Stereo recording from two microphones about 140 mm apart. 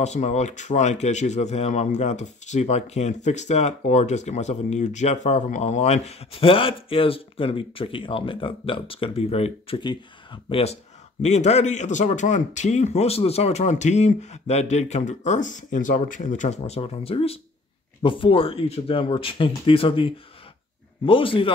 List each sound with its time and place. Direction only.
0.0 s speech: 55° left (ahead or behind)
9.8 s speech: 35° left (ahead or behind)
11.2 s speech: 55° left (ahead or behind)